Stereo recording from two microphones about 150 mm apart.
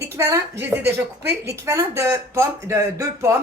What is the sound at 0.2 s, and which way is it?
A woman's voice, 15° right (ahead or behind).